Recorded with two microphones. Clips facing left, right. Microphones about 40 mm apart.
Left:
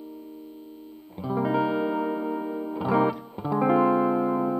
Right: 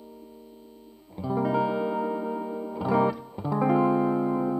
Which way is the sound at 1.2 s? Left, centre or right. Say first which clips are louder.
Left 1 dB; centre.